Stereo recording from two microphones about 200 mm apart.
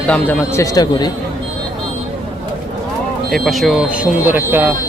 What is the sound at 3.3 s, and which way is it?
Speech, centre (ahead or behind).